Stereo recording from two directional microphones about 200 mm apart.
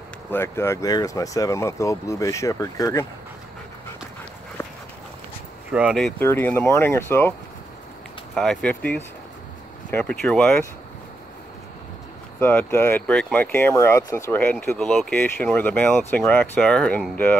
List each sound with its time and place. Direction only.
0.3 s speech: 10° left (ahead or behind)
5.7 s speech: 5° right (ahead or behind); by 7.3 s 10° left (ahead or behind)
8.4 s speech: 5° left (ahead or behind)
12.4 s speech: 10° left (ahead or behind)